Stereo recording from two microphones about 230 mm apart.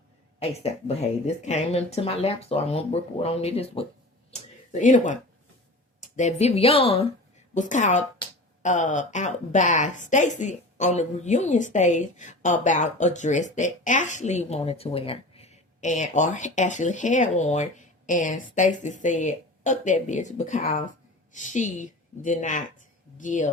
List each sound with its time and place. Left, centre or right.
0.3 s speech: left
4.3 s a sound: left
6.1 s a woman's voice: left